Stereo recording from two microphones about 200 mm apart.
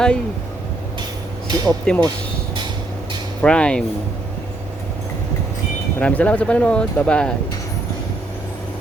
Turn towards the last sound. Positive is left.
turn(degrees=5)  # may be behind; listen again after turning